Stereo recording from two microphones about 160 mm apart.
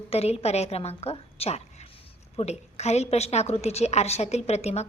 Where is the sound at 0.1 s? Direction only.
40° left (ahead or behind).